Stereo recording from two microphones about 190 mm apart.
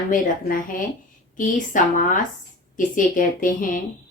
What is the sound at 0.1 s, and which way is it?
A woman's voice, 45° left (ahead or behind).